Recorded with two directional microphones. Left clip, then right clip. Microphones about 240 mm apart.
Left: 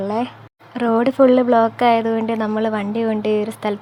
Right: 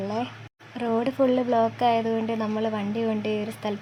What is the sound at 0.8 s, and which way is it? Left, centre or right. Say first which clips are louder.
A woman's voice: left 9 dB; centre.